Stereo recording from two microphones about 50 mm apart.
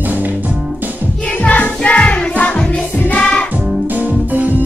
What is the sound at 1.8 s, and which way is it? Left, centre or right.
Music, left.